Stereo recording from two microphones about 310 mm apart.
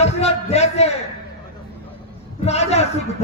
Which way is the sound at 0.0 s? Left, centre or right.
Centre.